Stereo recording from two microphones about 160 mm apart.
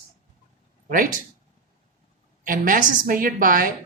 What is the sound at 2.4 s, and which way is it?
A woman's voice, 60° right (ahead or behind).